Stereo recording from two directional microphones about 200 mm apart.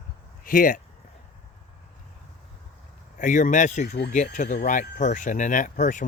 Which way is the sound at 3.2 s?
40° left (ahead or behind).